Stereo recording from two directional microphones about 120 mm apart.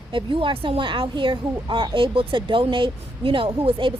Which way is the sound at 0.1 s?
45° right (ahead or behind).